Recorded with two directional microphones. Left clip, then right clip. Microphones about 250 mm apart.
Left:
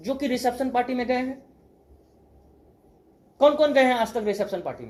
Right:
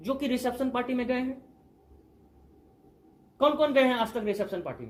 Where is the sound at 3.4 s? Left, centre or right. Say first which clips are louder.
Left 5 dB; right.